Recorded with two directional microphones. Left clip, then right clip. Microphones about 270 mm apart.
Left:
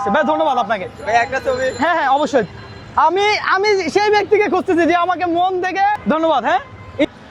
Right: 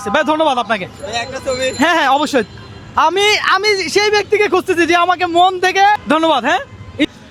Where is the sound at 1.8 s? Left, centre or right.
Centre.